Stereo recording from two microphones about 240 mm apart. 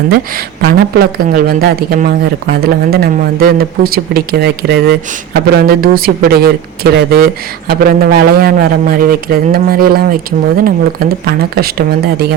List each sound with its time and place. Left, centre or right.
0.6 s speech: right